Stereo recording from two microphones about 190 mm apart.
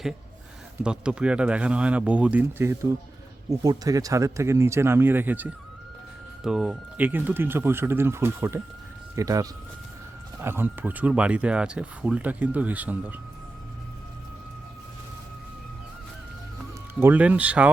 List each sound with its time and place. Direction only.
0.8 s speech: 5° right (ahead or behind)
17.0 s speech: 10° right (ahead or behind)